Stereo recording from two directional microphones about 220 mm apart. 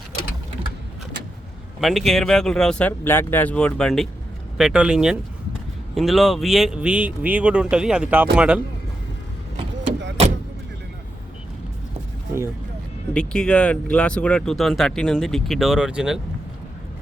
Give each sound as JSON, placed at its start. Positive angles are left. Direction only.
{"t": 1.8, "sound": "speech", "side_deg": 0}
{"t": 13.1, "sound": "speech", "side_deg": 5}